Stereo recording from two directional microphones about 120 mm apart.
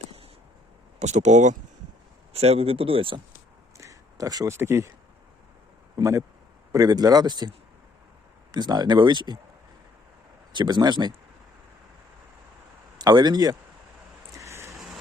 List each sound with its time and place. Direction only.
0.9 s speech: 75° right (ahead or behind)
2.3 s speech: 60° right (ahead or behind)
3.8 s a sound: 25° right (ahead or behind)
6.0 s speech: 25° right (ahead or behind)
8.5 s speech: 35° right (ahead or behind)
10.5 s speech: 40° right (ahead or behind)
13.0 s speech: 35° right (ahead or behind)
14.3 s vehicle: 25° right (ahead or behind)